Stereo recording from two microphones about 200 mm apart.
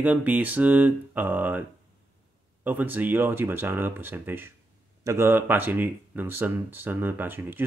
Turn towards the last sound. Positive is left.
turn(degrees=-10)  # may be behind; listen again after turning